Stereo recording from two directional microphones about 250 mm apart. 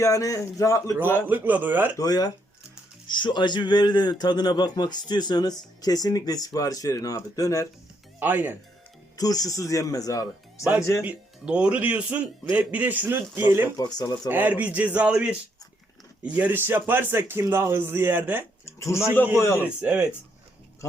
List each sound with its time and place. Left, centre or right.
0.0 s a man's voice: centre
1.3 s speech: centre
2.0 s a man's voice: centre
8.2 s speech: centre
9.1 s a man's voice: centre
11.0 s speech: centre
13.7 s a man's voice: centre
14.3 s speech: centre
18.6 s a man's voice: centre
19.6 s speech: centre